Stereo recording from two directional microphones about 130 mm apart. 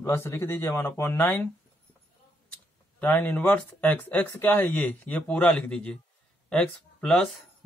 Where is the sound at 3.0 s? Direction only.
15° left (ahead or behind).